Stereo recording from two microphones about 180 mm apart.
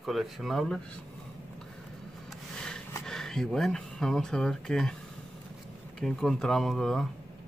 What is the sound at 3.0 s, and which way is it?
Speech, centre (ahead or behind).